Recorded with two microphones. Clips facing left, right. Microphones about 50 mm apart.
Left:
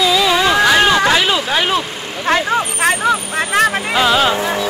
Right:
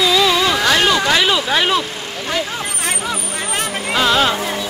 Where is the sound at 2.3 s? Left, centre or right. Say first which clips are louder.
Left 7 dB; left.